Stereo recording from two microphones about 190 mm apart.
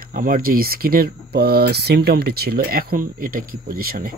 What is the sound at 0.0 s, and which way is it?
Speech, 50° right (ahead or behind).